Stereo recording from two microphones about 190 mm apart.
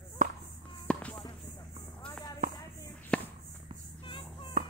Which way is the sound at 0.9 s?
5° left (ahead or behind).